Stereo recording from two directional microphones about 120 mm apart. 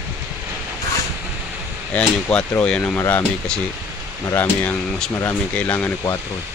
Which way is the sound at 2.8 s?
20° left (ahead or behind).